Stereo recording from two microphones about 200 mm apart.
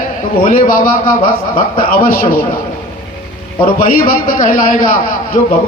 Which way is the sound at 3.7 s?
45° left (ahead or behind).